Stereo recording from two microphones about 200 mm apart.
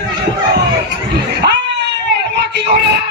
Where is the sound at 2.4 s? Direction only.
60° right (ahead or behind).